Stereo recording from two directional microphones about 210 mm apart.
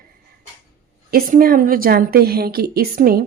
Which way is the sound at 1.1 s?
45° right (ahead or behind).